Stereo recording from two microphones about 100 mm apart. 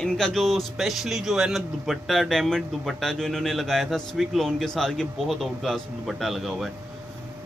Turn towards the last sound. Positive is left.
turn(degrees=0)  # may be behind; listen again after turning